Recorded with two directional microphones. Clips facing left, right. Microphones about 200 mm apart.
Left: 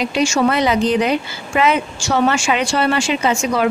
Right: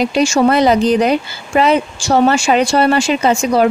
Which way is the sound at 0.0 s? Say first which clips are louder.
Right 4 dB; 35° right (ahead or behind).